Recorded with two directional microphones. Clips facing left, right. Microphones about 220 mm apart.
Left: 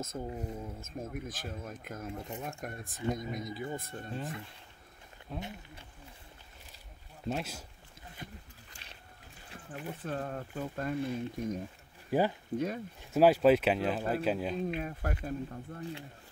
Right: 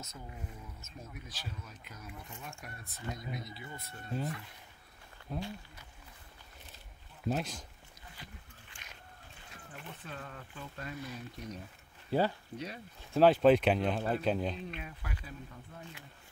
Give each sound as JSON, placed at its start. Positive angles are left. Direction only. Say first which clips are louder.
{"t": 0.0, "sound": "speech", "louder": "left 10 dB", "side_deg": 45}
{"t": 5.3, "sound": "speech", "louder": "right 2 dB", "side_deg": 0}
{"t": 7.2, "sound": "speech", "louder": "right 1 dB", "side_deg": 5}
{"t": 8.6, "sound": "a sound", "louder": "left 1 dB", "side_deg": 40}
{"t": 9.8, "sound": "speech", "louder": "left 10 dB", "side_deg": 45}
{"t": 11.0, "sound": "speech", "louder": "left 11 dB", "side_deg": 25}
{"t": 11.3, "sound": "speech", "louder": "left 9 dB", "side_deg": 50}
{"t": 12.1, "sound": "speech", "louder": "left 2 dB", "side_deg": 15}
{"t": 12.5, "sound": "speech", "louder": "left 9 dB", "side_deg": 50}
{"t": 13.1, "sound": "speech", "louder": "even", "side_deg": 10}
{"t": 14.8, "sound": "speech", "louder": "left 9 dB", "side_deg": 45}